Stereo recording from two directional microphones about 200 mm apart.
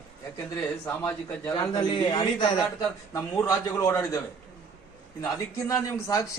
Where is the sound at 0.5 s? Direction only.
10° left (ahead or behind).